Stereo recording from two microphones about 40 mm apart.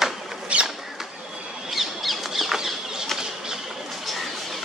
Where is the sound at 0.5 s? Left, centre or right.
Right.